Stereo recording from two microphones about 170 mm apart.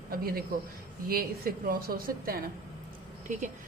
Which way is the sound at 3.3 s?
45° right (ahead or behind).